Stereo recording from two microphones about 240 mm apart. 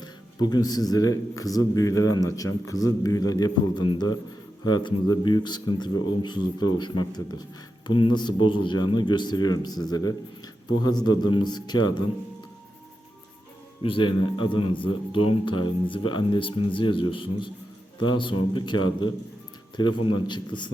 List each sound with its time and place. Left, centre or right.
0.4 s a man's voice: centre
13.8 s speech: left